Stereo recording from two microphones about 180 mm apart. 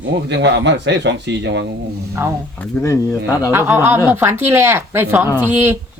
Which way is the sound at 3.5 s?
15° right (ahead or behind).